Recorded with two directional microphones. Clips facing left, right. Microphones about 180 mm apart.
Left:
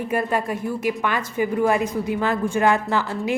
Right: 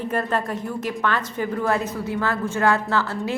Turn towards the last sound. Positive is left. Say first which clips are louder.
# left 1 dB
turn(degrees=15)  # may be behind; listen again after turning